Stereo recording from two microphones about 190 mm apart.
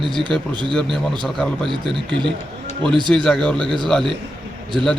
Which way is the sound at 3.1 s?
5° left (ahead or behind).